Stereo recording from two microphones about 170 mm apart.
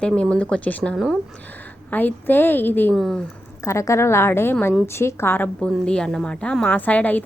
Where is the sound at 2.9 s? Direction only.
Centre (ahead or behind).